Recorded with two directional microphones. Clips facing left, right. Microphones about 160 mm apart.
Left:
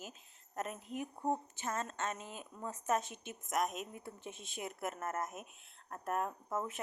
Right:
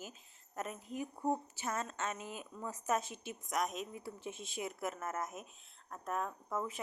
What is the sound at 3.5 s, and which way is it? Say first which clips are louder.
Speech: left 1 dB; centre (ahead or behind).